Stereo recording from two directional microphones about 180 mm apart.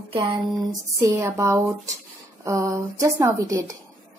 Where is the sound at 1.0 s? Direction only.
15° right (ahead or behind).